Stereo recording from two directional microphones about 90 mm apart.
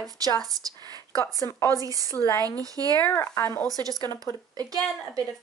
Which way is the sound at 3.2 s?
40° left (ahead or behind).